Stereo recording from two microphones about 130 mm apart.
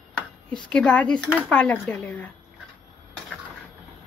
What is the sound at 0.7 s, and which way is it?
Speech, 10° left (ahead or behind).